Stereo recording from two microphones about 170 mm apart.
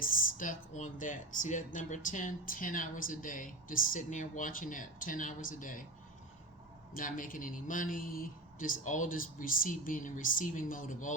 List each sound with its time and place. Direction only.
0.0 s speech: 55° left (ahead or behind)
6.9 s speech: 55° left (ahead or behind)